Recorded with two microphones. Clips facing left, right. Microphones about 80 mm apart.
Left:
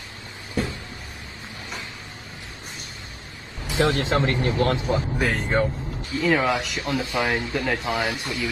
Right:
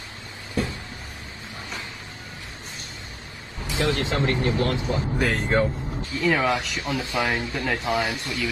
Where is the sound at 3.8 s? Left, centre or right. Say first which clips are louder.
Left 1 dB; left.